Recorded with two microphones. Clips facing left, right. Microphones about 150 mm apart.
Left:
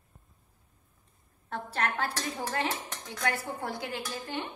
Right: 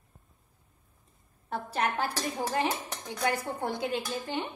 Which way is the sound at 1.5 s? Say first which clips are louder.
Right 2 dB; 15° right (ahead or behind).